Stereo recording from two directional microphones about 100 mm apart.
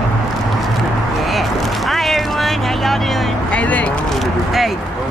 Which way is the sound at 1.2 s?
Centre (ahead or behind).